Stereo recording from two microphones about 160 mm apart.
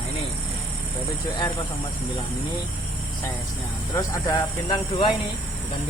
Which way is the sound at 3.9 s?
20° left (ahead or behind).